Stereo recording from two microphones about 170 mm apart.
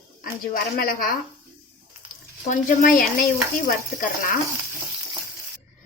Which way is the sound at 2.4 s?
55° left (ahead or behind).